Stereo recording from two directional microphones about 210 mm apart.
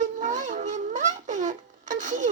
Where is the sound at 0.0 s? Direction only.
35° right (ahead or behind).